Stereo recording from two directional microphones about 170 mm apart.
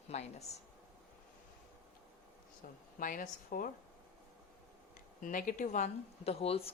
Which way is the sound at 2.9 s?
55° left (ahead or behind).